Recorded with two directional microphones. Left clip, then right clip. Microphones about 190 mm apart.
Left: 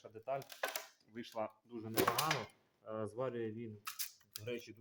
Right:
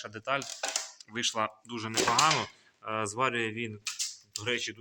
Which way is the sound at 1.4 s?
15° right (ahead or behind).